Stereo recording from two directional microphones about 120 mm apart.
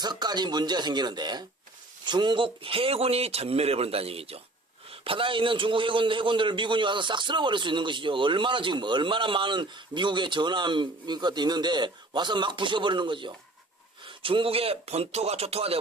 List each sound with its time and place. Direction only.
0.0 s a man's voice: 35° right (ahead or behind); by 15.8 s 55° right (ahead or behind)